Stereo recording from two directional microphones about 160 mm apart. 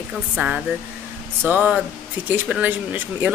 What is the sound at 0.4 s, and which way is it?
A woman's voice, 10° right (ahead or behind).